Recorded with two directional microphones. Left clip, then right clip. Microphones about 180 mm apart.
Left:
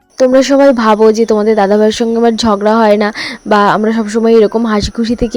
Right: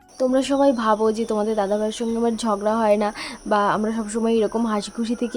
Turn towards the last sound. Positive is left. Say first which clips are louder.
# left 11 dB
turn(degrees=30)  # may be behind; listen again after turning